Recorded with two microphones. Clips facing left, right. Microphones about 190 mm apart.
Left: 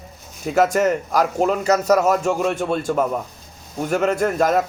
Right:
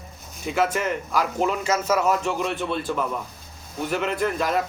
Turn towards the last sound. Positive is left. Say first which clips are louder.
# left 5 dB
turn(degrees=45)  # may be behind; listen again after turning